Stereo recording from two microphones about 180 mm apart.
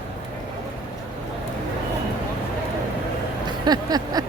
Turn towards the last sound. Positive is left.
turn(degrees=-20)  # may be behind; listen again after turning